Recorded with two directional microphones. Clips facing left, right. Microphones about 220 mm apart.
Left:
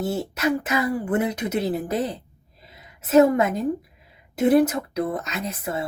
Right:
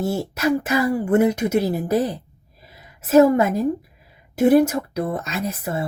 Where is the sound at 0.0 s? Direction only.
30° right (ahead or behind).